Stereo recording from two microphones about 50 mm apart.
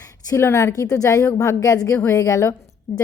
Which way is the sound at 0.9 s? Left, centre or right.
Left.